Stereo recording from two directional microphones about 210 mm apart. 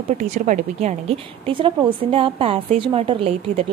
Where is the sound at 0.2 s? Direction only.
35° right (ahead or behind).